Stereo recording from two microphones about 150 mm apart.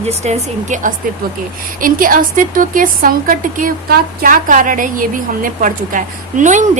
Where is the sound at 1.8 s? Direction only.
70° right (ahead or behind).